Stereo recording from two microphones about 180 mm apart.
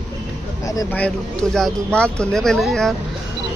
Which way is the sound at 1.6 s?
5° left (ahead or behind).